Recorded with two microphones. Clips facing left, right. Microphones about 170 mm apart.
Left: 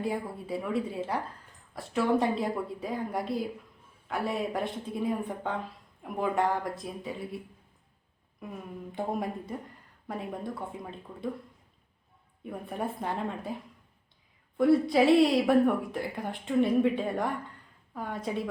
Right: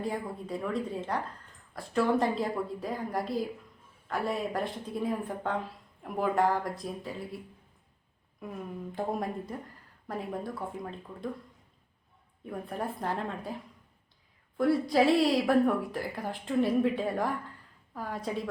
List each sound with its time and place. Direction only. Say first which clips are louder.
0.0 s a woman's voice: left 1 dB; 5° left (ahead or behind)
8.9 s a woman's voice: left 1 dB; centre (ahead or behind)
12.5 s a woman's voice: left 1 dB; centre (ahead or behind)
14.6 s a woman's voice: left 2 dB; centre (ahead or behind)